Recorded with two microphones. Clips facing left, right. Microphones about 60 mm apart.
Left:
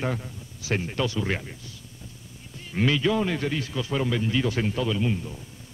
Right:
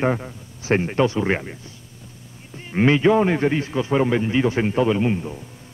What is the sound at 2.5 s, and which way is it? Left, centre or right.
Speech, right.